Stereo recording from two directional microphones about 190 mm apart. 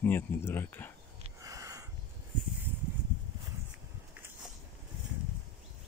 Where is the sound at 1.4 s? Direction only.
20° right (ahead or behind).